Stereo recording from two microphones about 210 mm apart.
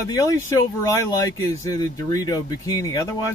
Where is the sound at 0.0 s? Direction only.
15° left (ahead or behind).